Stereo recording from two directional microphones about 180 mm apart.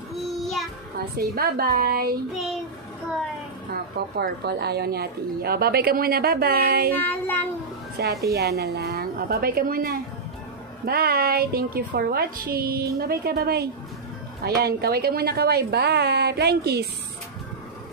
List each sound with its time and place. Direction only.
0.1 s child singing: centre (ahead or behind)
1.1 s a woman's voice: 55° right (ahead or behind)
4.2 s a woman's voice: 65° right (ahead or behind)
7.0 s child singing: 10° left (ahead or behind)
8.0 s a woman's voice: 60° right (ahead or behind)